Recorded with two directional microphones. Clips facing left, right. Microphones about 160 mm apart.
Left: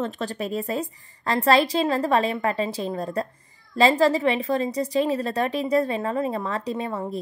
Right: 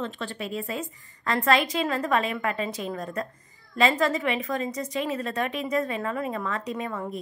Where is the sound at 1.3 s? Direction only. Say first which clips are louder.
Left 4 dB; 30° left (ahead or behind).